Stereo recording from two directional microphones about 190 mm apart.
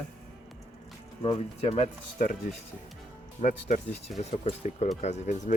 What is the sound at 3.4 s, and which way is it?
Speech, 40° left (ahead or behind).